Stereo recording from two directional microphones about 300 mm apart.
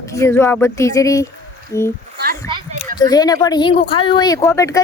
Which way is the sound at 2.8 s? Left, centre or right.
Centre.